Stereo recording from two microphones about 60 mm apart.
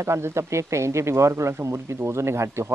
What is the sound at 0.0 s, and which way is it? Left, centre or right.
Speech, right.